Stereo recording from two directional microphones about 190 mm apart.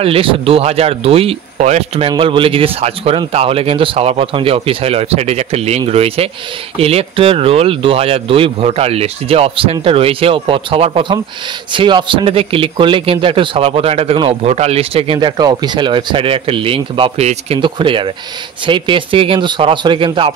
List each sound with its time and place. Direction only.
0.0 s a man's voice: 30° right (ahead or behind)